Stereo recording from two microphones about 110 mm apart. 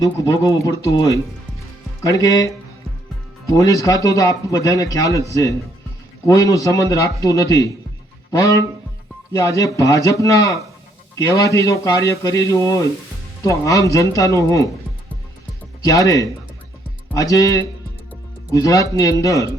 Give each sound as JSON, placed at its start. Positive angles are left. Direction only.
{"t": 0.6, "sound": "a man's voice", "side_deg": 30}
{"t": 15.8, "sound": "speech", "side_deg": 30}